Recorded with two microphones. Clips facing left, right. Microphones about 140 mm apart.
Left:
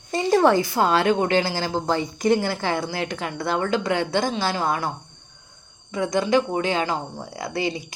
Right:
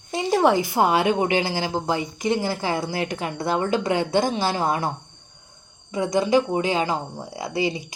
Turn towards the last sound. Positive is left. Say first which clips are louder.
# right 1 dB
turn(degrees=-10)  # may be behind; listen again after turning